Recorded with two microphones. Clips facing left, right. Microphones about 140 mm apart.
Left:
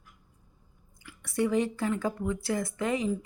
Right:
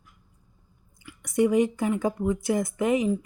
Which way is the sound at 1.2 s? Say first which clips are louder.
Right 5 dB; 15° right (ahead or behind).